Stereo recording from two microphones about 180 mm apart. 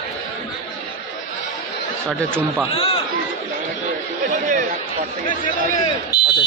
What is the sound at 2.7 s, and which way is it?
Speech, 30° left (ahead or behind).